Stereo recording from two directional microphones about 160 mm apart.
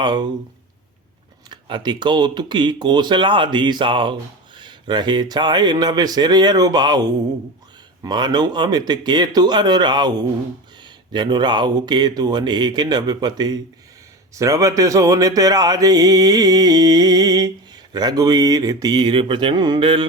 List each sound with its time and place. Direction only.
0.0 s speech: 30° right (ahead or behind)
1.5 s speech: 30° right (ahead or behind)